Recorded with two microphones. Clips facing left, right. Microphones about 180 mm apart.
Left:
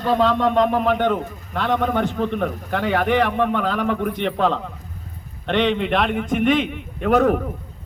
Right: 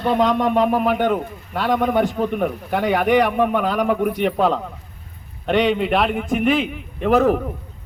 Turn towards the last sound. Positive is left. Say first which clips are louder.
# right 1 dB
turn(degrees=0)  # may be behind; listen again after turning